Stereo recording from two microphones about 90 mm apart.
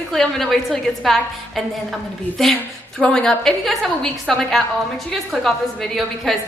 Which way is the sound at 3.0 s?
10° left (ahead or behind).